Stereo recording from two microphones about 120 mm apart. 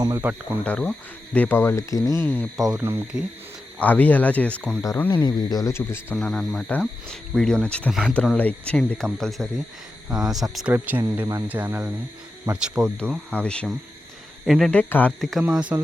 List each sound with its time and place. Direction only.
0.0 s speech: 30° right (ahead or behind)
0.6 s speech: 10° left (ahead or behind)
2.7 s speech: 20° right (ahead or behind)
3.8 s speech: 15° left (ahead or behind)
5.2 s speech: 35° left (ahead or behind)
6.1 s speech: 5° left (ahead or behind)
10.7 s speech: 15° right (ahead or behind)
13.3 s speech: 10° left (ahead or behind)
14.4 s speech: 5° right (ahead or behind)
14.7 s speech: 15° left (ahead or behind)
15.2 s speech: centre (ahead or behind)
15.5 s speech: 10° right (ahead or behind)